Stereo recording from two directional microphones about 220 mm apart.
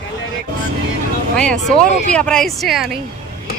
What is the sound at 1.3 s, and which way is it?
A woman's voice, 5° left (ahead or behind).